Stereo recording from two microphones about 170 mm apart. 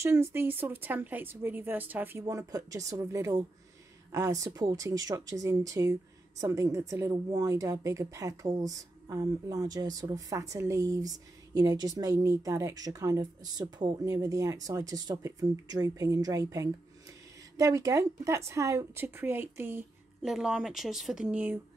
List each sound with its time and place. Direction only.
0.0 s a woman's voice: 15° right (ahead or behind)
20.2 s a woman's voice: centre (ahead or behind)